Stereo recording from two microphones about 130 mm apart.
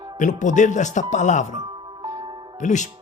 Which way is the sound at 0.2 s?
75° left (ahead or behind).